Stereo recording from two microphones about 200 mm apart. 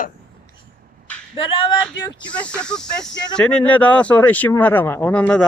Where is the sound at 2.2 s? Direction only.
5° left (ahead or behind).